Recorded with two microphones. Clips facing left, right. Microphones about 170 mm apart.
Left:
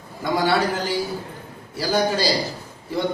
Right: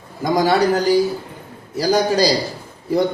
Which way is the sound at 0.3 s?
40° right (ahead or behind).